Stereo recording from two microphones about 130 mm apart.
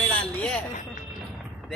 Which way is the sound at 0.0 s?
10° left (ahead or behind).